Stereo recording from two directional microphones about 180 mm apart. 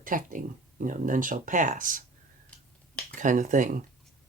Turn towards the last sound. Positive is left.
turn(degrees=-45)  # may be behind; listen again after turning